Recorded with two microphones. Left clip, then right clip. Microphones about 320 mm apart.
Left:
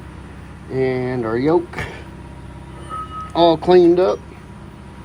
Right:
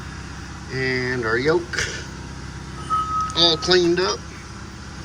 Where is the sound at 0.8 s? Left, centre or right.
Centre.